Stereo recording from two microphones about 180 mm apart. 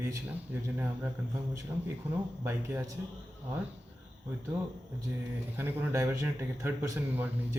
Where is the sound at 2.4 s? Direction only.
15° right (ahead or behind).